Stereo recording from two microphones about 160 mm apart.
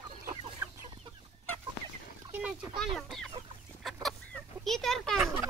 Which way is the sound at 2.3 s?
10° right (ahead or behind).